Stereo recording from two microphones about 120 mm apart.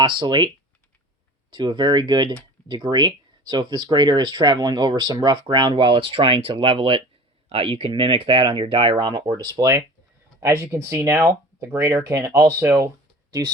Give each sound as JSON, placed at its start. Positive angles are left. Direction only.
{"t": 0.0, "sound": "speech", "side_deg": -45}